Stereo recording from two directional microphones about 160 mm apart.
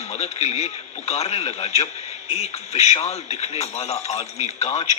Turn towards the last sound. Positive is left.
turn(degrees=40)  # may be behind; listen again after turning